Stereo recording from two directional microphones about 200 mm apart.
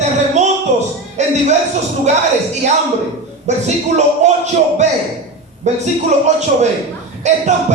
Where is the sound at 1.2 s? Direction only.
35° right (ahead or behind).